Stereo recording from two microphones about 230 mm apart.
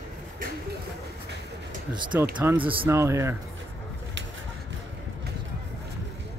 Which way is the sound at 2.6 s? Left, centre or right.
Right.